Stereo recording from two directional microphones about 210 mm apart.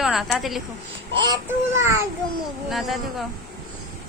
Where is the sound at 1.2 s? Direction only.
20° right (ahead or behind).